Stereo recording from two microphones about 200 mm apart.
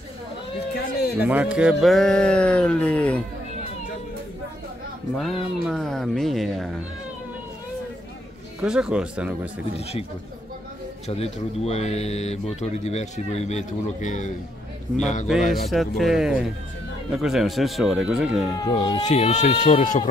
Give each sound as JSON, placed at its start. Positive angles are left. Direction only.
{"t": 0.7, "sound": "a sound", "side_deg": 55}
{"t": 1.2, "sound": "speech", "side_deg": -5}
{"t": 5.1, "sound": "speech", "side_deg": 0}
{"t": 8.5, "sound": "speech", "side_deg": -5}
{"t": 11.1, "sound": "speech", "side_deg": 30}
{"t": 15.5, "sound": "speech", "side_deg": 0}
{"t": 18.6, "sound": "speech", "side_deg": 20}
{"t": 19.0, "sound": "speech", "side_deg": 35}